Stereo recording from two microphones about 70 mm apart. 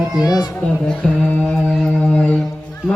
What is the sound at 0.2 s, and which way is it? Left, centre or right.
Speech, left.